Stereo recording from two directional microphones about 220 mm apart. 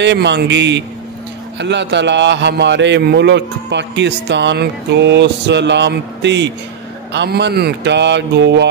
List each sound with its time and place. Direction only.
0.0 s a man's voice: 50° right (ahead or behind)